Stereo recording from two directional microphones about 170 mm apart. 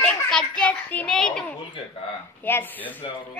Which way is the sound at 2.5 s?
10° left (ahead or behind).